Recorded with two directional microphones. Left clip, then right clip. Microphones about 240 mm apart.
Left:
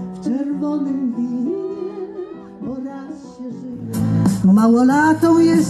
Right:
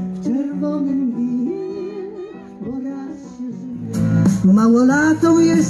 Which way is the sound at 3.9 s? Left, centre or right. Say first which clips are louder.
Right 1 dB; left.